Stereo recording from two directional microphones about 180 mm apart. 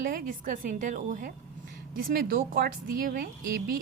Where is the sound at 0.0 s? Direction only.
50° right (ahead or behind).